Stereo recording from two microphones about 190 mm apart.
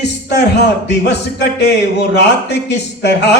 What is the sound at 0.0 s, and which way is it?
Speech, 65° left (ahead or behind).